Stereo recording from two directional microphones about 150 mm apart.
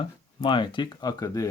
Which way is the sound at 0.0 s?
30° left (ahead or behind).